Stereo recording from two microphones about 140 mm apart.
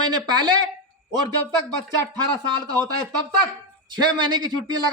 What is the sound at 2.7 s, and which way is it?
Speech, 30° right (ahead or behind).